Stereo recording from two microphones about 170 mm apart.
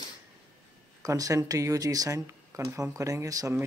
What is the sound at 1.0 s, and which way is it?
A man's voice, 20° right (ahead or behind).